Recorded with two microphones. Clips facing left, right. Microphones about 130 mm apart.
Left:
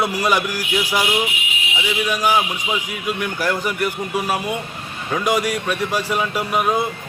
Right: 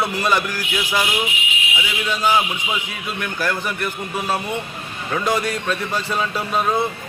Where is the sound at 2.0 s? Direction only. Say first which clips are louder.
Right 1 dB; 15° left (ahead or behind).